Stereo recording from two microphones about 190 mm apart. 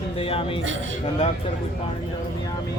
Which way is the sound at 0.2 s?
30° left (ahead or behind).